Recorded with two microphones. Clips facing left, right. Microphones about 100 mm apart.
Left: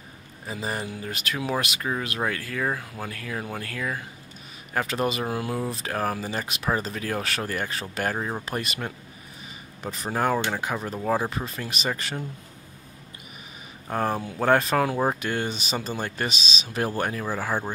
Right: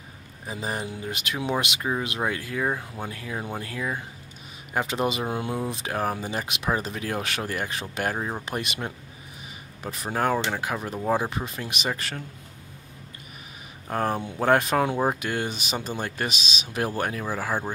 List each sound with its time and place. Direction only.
0.5 s speech: 10° right (ahead or behind)
1.8 s speech: 10° right (ahead or behind)
13.8 s speech: centre (ahead or behind)